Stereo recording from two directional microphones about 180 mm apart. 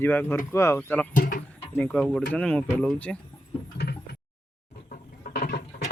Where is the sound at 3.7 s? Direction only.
65° left (ahead or behind).